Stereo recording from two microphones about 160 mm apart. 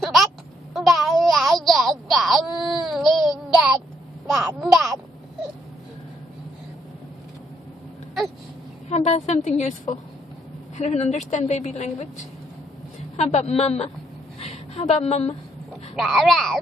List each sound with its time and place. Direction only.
0.0 s a sound: centre (ahead or behind)
0.7 s baby cry: centre (ahead or behind)
4.3 s speech: centre (ahead or behind)
8.8 s a woman's voice: 40° left (ahead or behind)
13.1 s a woman's voice: 40° left (ahead or behind)
16.0 s speech: centre (ahead or behind)